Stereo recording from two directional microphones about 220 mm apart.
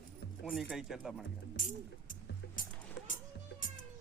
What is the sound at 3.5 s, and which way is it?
Music, 50° left (ahead or behind).